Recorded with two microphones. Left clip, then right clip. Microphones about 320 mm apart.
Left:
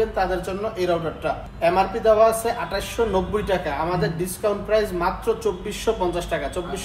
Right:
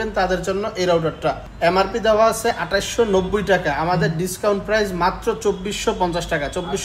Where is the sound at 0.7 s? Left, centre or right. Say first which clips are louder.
Right 5 dB; right.